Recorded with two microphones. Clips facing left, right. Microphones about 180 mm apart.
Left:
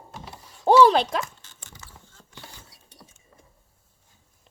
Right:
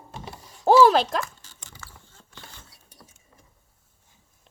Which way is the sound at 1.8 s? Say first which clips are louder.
Right 2 dB; 20° left (ahead or behind).